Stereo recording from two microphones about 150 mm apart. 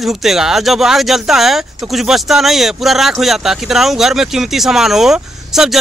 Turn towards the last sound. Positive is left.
turn(degrees=0)  # may be behind; listen again after turning